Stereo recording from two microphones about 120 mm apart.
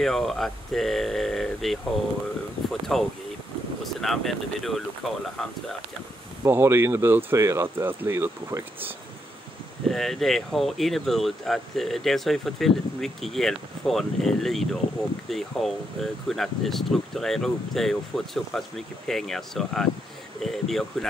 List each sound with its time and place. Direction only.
0.0 s speech: centre (ahead or behind)
6.4 s speech: 20° right (ahead or behind)
9.8 s speech: centre (ahead or behind)